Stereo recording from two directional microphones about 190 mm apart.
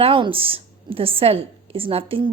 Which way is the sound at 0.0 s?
30° right (ahead or behind).